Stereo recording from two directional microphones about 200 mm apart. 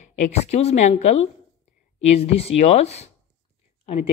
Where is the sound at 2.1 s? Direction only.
30° left (ahead or behind).